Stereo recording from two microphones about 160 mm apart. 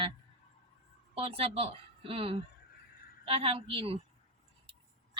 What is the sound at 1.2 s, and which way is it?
A woman's voice, 35° right (ahead or behind).